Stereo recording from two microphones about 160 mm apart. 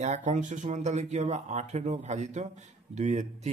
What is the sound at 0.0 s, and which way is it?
Speech, 45° right (ahead or behind).